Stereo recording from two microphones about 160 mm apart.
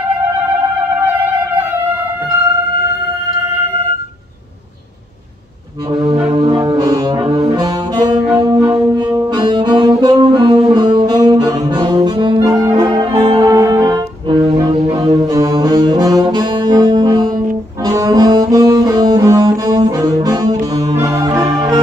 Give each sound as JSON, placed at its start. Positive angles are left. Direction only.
{"t": 6.3, "sound": "saxophone", "side_deg": -30}
{"t": 8.4, "sound": "music", "side_deg": -25}
{"t": 17.8, "sound": "brass instrument", "side_deg": -20}
{"t": 20.7, "sound": "music", "side_deg": -20}